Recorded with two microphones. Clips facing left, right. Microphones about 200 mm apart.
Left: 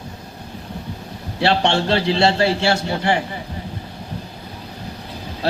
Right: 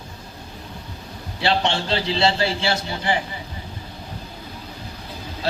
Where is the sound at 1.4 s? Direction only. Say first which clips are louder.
Left 4 dB; 65° left (ahead or behind).